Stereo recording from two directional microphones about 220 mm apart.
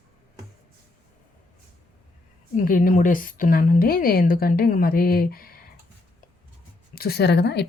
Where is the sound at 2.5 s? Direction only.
40° left (ahead or behind).